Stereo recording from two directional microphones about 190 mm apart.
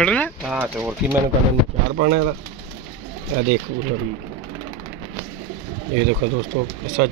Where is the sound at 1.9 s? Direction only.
45° right (ahead or behind).